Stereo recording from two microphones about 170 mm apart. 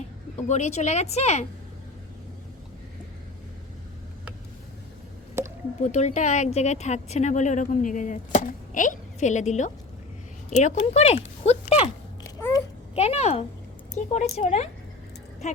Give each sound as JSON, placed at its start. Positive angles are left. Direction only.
{"t": 0.4, "sound": "speech", "side_deg": 40}
{"t": 5.4, "sound": "squish", "side_deg": -15}
{"t": 5.8, "sound": "speech", "side_deg": 45}
{"t": 12.4, "sound": "a sound", "side_deg": 15}
{"t": 13.0, "sound": "speech", "side_deg": 40}